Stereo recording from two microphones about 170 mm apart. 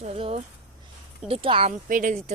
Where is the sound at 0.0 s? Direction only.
35° right (ahead or behind).